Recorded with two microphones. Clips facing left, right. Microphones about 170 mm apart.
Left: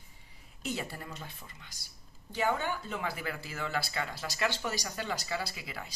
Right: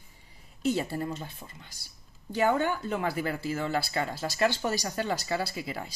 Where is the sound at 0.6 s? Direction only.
35° right (ahead or behind).